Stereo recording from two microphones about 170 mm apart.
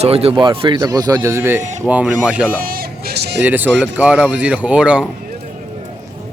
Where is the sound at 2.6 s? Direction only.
60° right (ahead or behind).